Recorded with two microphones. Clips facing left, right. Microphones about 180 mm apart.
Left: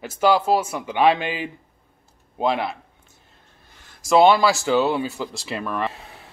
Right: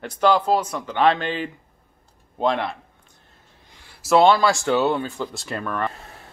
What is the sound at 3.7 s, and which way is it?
Speech, 10° right (ahead or behind).